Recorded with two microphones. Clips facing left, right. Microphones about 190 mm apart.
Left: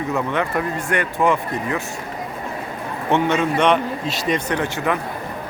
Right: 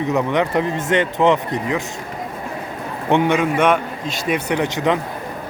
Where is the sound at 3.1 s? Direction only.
15° right (ahead or behind).